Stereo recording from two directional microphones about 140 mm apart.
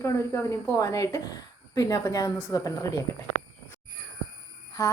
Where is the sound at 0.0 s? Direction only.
20° left (ahead or behind).